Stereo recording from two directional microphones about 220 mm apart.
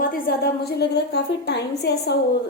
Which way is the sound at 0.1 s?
45° left (ahead or behind).